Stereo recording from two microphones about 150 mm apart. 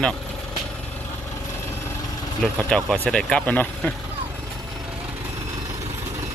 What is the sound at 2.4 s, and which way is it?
Speech, 5° left (ahead or behind).